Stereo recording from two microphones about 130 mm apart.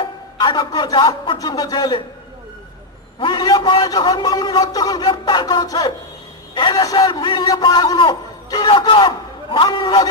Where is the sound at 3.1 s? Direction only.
35° left (ahead or behind).